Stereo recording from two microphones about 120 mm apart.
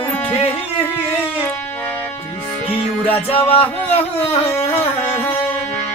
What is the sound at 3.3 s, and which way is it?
Music, 50° left (ahead or behind).